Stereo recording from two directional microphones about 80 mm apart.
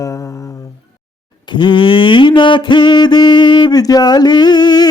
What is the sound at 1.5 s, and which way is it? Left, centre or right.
Music, left.